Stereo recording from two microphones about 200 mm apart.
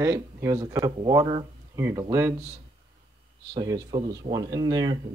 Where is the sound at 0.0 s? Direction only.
15° right (ahead or behind).